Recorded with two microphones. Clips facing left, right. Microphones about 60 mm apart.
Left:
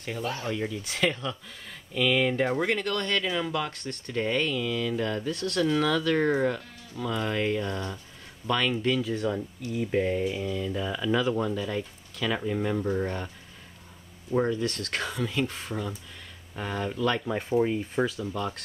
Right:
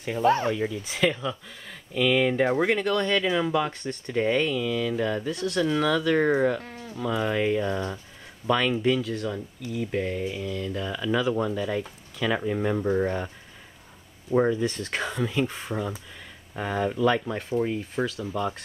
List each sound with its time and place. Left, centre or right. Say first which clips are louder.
0.2 s speech: right 13 dB; right
0.5 s speech: right 4 dB; centre
9.0 s speech: left 2 dB; centre
14.3 s speech: right 3 dB; centre
17.3 s speech: left 1 dB; centre
18.2 s speech: right 3 dB; centre